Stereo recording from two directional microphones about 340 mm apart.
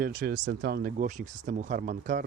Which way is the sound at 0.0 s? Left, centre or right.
Right.